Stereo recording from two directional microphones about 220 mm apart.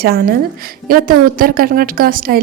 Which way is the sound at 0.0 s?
45° right (ahead or behind).